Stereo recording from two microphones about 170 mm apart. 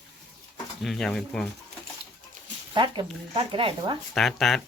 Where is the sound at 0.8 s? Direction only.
Centre (ahead or behind).